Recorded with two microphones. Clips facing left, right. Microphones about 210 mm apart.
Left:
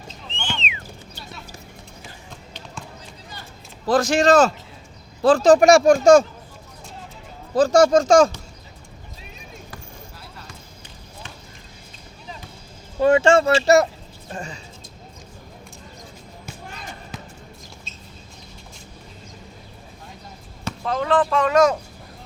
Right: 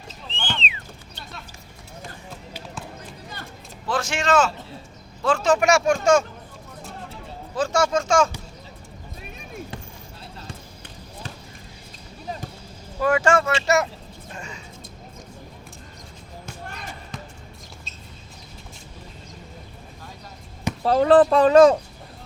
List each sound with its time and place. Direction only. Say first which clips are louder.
0.3 s a sound: right 1 dB; 35° right (ahead or behind)
3.8 s speech: left 7 dB; 35° left (ahead or behind)
7.5 s speech: left 7 dB; 35° left (ahead or behind)
13.0 s speech: left 5 dB; 25° left (ahead or behind)
17.1 s basketball bounce: right 1 dB; 5° left (ahead or behind)
20.8 s speech: right 6 dB; 35° right (ahead or behind)